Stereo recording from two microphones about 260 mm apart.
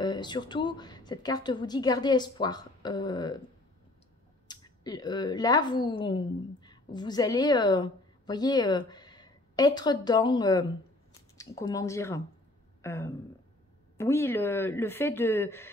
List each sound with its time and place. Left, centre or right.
0.0 s a woman's voice: centre
4.5 s a woman's voice: centre
12.8 s a sound: centre
13.9 s a woman's voice: centre